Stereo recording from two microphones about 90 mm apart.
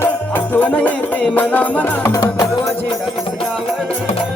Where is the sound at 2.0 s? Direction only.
40° left (ahead or behind).